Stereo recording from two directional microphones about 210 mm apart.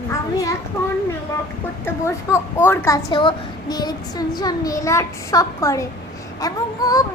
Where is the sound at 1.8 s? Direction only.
10° left (ahead or behind).